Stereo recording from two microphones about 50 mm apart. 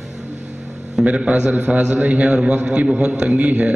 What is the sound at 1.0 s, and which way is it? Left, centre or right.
Speech, centre.